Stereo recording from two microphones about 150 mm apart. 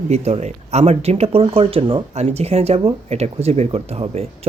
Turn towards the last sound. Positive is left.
turn(degrees=-45)  # may be behind; listen again after turning